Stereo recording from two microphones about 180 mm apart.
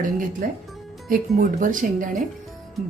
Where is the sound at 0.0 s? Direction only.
45° right (ahead or behind).